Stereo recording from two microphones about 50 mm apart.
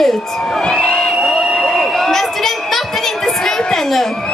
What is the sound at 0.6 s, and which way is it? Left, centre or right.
Crowd, centre.